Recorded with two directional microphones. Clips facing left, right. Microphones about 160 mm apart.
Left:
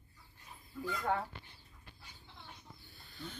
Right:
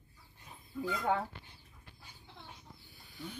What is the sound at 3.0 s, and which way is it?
Chicken, 15° right (ahead or behind).